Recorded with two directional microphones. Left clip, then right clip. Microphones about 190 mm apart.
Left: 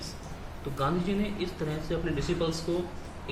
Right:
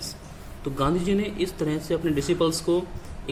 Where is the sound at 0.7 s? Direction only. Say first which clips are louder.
Right 5 dB; 45° right (ahead or behind).